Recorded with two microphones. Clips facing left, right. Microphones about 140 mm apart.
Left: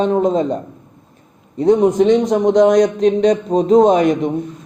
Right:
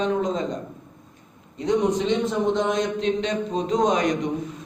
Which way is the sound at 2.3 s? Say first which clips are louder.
Left 11 dB; 85° left.